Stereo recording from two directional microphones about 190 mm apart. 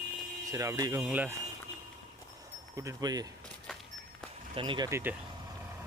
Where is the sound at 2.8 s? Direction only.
20° right (ahead or behind).